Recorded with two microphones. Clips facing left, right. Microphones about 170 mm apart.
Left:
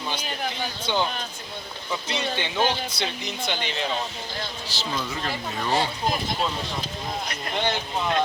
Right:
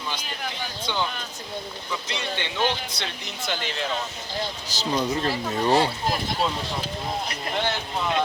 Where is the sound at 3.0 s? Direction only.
Centre (ahead or behind).